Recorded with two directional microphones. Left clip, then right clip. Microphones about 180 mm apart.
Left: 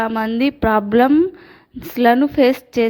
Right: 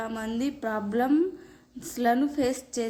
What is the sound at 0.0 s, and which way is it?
A woman's voice, 35° left (ahead or behind).